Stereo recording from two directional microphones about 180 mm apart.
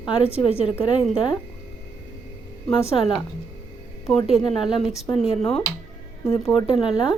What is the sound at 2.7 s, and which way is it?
Speech, 30° left (ahead or behind).